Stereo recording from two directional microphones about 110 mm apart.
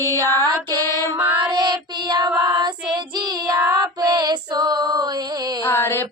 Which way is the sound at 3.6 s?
35° right (ahead or behind).